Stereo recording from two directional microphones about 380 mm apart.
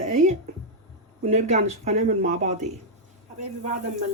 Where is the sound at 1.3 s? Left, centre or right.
Centre.